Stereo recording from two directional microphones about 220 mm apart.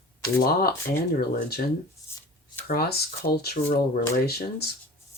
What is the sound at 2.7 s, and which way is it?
Speech, 45° left (ahead or behind).